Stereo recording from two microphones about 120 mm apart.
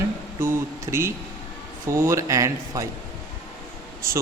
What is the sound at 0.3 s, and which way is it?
Speech, 20° right (ahead or behind).